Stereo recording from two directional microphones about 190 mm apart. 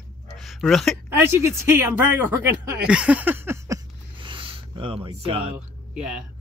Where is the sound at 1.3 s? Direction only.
10° right (ahead or behind); by 5.5 s 30° right (ahead or behind).